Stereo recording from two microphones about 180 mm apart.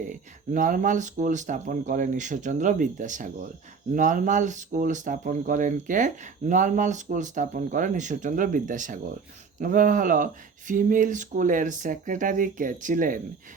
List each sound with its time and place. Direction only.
0.1 s speech: 45° right (ahead or behind)